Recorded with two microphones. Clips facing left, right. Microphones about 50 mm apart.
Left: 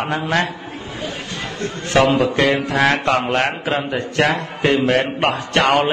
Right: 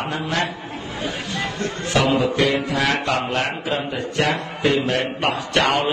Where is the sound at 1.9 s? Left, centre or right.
Left.